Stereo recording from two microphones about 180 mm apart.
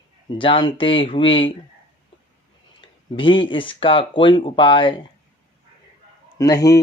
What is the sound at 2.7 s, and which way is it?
Speech, 30° left (ahead or behind).